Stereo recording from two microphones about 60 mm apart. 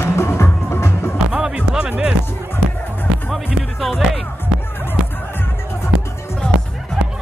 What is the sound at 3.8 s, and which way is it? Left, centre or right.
Music, centre.